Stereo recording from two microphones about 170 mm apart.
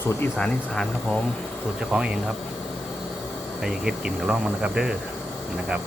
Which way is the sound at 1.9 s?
5° right (ahead or behind).